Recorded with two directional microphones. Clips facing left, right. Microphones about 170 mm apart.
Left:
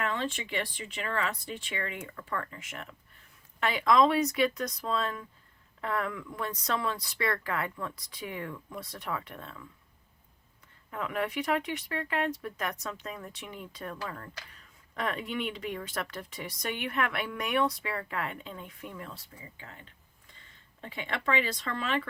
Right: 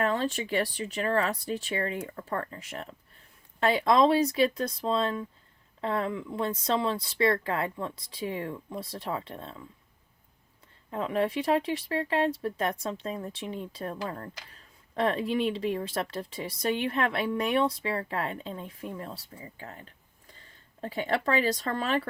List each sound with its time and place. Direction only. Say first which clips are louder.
0.0 s speech: right 5 dB; 35° right (ahead or behind)
10.9 s speech: right 4 dB; 30° right (ahead or behind)
20.8 s speech: right 5 dB; 40° right (ahead or behind)